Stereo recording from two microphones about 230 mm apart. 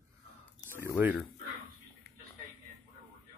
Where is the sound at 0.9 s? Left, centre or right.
Centre.